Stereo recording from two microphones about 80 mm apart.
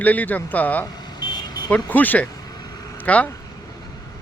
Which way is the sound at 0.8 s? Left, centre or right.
Left.